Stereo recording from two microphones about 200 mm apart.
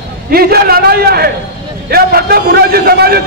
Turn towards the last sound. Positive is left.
turn(degrees=-50)  # may be behind; listen again after turning